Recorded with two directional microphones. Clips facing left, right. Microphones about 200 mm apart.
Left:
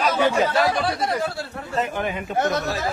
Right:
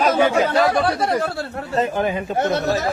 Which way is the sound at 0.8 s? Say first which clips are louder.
Right 4 dB; 55° right (ahead or behind).